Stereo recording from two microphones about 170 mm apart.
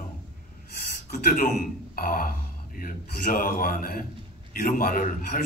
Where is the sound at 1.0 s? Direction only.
55° left (ahead or behind).